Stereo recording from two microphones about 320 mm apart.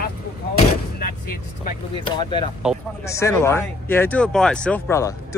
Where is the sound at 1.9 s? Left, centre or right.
Centre.